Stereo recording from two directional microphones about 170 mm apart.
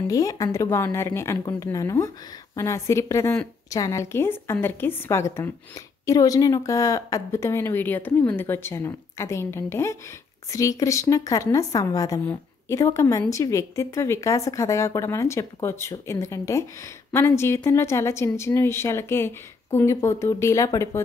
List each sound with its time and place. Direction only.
0.1 s a woman's voice: 20° left (ahead or behind)